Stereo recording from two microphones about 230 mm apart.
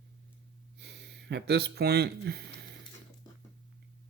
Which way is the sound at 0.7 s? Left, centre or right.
Right.